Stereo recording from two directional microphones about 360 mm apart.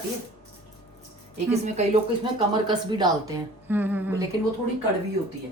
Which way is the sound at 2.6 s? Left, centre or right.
Centre.